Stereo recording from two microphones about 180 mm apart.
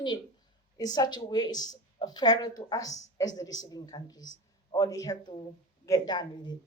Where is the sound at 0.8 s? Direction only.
20° left (ahead or behind).